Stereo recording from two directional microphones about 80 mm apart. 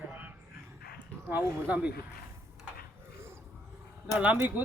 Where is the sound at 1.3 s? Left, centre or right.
Right.